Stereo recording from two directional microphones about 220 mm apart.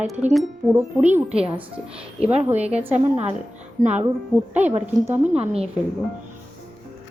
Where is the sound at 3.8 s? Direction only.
20° right (ahead or behind).